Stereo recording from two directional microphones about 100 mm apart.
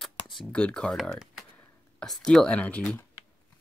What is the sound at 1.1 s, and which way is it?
Computer keyboard, 5° right (ahead or behind).